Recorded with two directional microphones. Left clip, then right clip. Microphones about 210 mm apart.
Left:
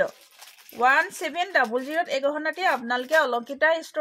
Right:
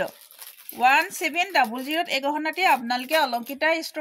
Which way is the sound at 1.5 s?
10° left (ahead or behind).